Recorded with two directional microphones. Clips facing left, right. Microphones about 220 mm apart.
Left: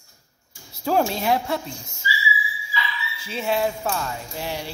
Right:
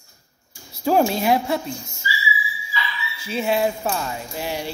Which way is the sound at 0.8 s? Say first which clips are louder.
Right 3 dB; 10° right (ahead or behind).